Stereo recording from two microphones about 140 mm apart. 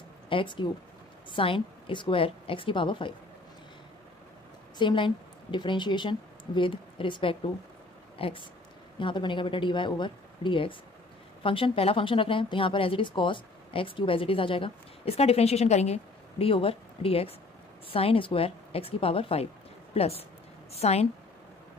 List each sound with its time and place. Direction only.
0.3 s speech: 35° left (ahead or behind)
4.7 s a woman's voice: 35° left (ahead or behind)